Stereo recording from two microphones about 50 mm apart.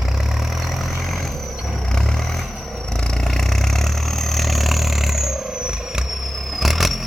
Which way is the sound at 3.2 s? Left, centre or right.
Centre.